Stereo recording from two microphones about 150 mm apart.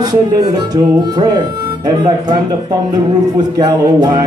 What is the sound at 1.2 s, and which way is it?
Speech, 25° right (ahead or behind).